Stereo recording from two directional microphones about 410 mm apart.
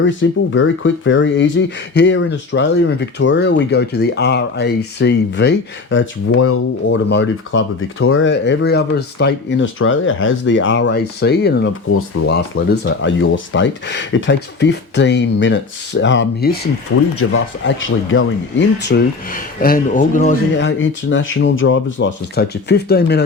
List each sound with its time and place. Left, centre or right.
0.0 s speech: left